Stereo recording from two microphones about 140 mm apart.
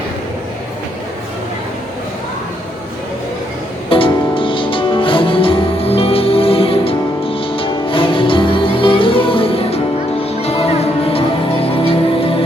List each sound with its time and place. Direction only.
3.8 s music: 40° left (ahead or behind)